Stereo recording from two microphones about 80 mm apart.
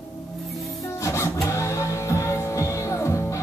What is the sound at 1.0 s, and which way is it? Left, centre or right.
Music, left.